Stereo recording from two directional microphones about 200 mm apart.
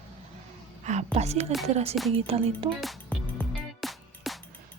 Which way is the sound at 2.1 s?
30° right (ahead or behind).